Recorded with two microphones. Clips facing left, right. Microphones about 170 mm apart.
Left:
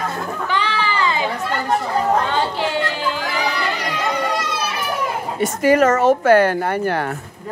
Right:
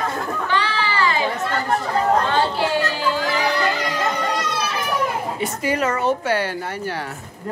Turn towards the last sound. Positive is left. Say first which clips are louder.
# left 7 dB
turn(degrees=55)  # may be behind; listen again after turning